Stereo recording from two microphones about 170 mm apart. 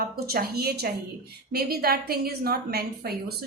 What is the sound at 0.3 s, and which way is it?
A woman's voice, 65° right (ahead or behind).